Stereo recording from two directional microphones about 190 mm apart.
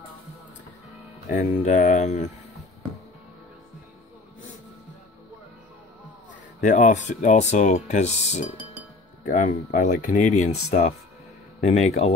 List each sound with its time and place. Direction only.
1.3 s speech: 40° left (ahead or behind)
6.6 s speech: 40° left (ahead or behind)